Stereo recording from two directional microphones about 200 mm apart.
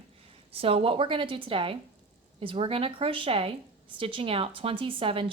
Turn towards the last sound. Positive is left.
turn(degrees=-25)  # may be behind; listen again after turning